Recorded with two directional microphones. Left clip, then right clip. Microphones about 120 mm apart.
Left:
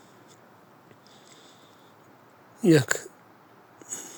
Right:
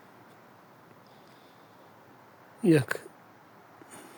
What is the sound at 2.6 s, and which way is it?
Speech, 10° left (ahead or behind).